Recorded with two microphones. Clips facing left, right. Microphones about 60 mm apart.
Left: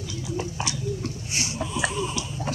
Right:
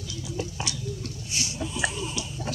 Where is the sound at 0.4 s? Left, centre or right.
Left.